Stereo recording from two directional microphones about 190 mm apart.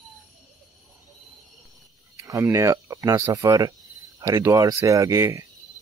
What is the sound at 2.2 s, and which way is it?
Speech, 15° right (ahead or behind).